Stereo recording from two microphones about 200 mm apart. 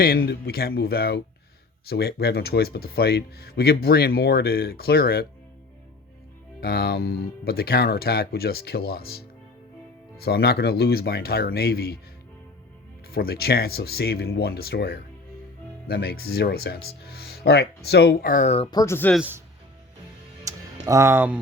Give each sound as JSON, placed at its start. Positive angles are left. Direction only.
{"t": 0.3, "sound": "speech", "side_deg": 50}
{"t": 6.6, "sound": "speech", "side_deg": 50}
{"t": 13.1, "sound": "speech", "side_deg": 50}
{"t": 19.1, "sound": "speech", "side_deg": -5}
{"t": 20.4, "sound": "music", "side_deg": -15}